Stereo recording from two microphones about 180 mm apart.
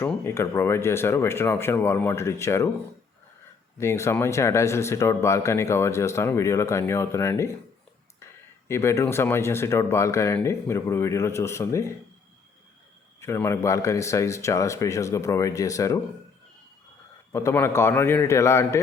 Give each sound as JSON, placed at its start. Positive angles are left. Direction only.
{"t": 0.0, "sound": "speech", "side_deg": 15}
{"t": 3.8, "sound": "speech", "side_deg": 15}
{"t": 13.1, "sound": "speech", "side_deg": 15}
{"t": 17.3, "sound": "speech", "side_deg": 15}